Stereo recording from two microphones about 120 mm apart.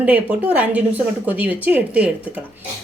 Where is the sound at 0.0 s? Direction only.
10° right (ahead or behind).